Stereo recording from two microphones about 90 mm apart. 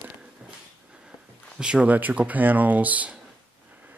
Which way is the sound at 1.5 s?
10° right (ahead or behind).